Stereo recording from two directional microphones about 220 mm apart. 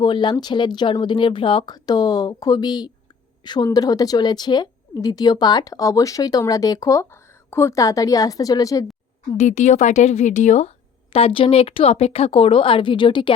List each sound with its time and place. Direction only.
0.0 s a woman's voice: 20° left (ahead or behind)
9.4 s a woman's voice: 30° left (ahead or behind)